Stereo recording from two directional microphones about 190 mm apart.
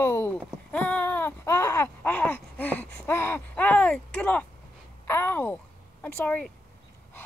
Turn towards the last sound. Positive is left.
turn(degrees=10)  # may be behind; listen again after turning